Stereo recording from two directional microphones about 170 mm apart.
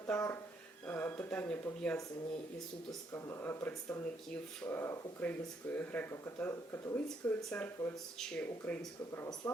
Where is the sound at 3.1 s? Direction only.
15° left (ahead or behind).